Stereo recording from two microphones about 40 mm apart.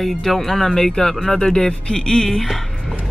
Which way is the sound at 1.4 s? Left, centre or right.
Centre.